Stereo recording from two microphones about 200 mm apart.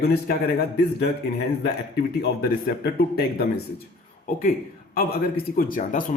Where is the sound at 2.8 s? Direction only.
50° left (ahead or behind).